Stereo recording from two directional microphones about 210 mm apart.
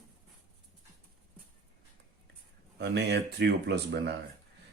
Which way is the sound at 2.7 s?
55° right (ahead or behind).